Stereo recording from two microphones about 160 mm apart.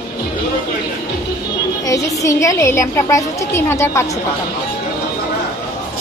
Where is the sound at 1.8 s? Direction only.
20° left (ahead or behind).